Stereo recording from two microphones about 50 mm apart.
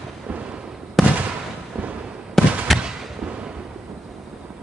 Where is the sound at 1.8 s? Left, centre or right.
Right.